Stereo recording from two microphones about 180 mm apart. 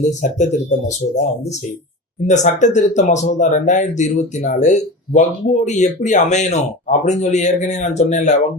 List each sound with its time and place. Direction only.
0.1 s speech: 40° left (ahead or behind)
2.2 s speech: 40° left (ahead or behind)